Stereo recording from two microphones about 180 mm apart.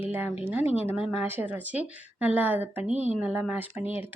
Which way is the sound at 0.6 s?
35° left (ahead or behind).